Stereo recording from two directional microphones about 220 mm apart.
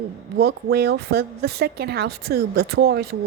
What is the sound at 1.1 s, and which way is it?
Speech, 45° right (ahead or behind).